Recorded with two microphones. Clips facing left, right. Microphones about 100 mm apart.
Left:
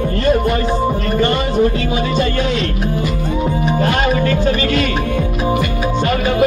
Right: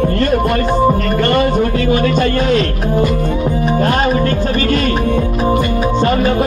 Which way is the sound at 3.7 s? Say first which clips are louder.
Right 2 dB; 40° right (ahead or behind).